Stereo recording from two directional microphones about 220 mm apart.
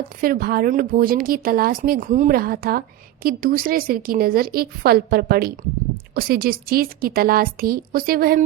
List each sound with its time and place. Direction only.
0.2 s a woman's voice: 40° right (ahead or behind)